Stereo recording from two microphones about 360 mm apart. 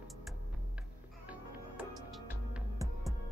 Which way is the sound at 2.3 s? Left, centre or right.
Centre.